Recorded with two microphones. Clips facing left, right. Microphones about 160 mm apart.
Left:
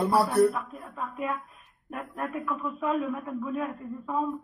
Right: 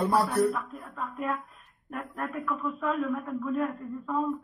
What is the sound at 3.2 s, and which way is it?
Speech, 15° left (ahead or behind).